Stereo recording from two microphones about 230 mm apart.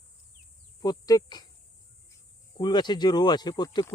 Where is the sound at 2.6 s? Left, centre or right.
Centre.